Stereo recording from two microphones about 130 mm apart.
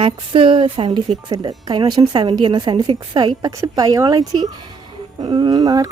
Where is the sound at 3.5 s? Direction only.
25° right (ahead or behind).